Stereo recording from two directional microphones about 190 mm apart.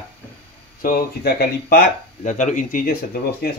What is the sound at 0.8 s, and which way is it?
Speech, 50° left (ahead or behind).